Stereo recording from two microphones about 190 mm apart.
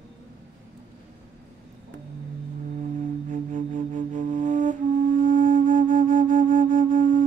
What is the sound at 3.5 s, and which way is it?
Flute, 40° right (ahead or behind).